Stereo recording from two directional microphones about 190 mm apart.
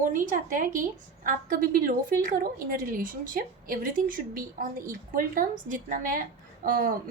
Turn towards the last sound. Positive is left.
turn(degrees=-50)  # may be behind; listen again after turning